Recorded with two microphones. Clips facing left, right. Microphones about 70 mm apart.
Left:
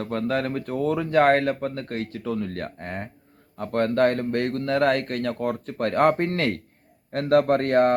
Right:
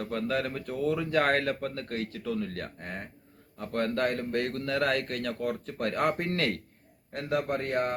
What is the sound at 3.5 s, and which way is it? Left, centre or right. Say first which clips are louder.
A man's voice: left 7 dB; left.